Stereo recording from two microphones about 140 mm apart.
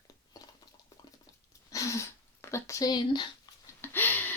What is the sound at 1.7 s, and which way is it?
Speech, 20° left (ahead or behind).